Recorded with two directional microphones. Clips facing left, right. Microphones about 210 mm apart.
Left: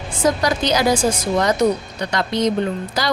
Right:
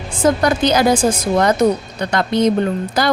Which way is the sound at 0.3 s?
55° right (ahead or behind).